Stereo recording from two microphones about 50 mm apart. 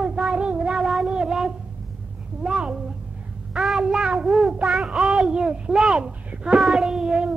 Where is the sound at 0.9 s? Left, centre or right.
Centre.